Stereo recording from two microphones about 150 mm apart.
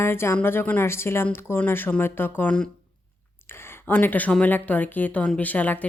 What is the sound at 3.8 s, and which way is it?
Speech, 10° left (ahead or behind).